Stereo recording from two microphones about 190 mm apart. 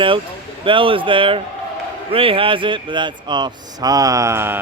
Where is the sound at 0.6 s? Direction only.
25° right (ahead or behind).